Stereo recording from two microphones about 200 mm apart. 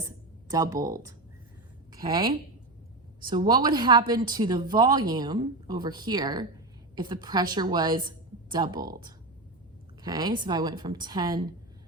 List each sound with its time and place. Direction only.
0.5 s a woman's voice: 15° right (ahead or behind)
10.0 s a woman's voice: 20° right (ahead or behind)